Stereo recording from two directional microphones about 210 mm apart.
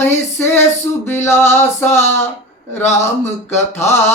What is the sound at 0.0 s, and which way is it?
Mantra, 10° left (ahead or behind).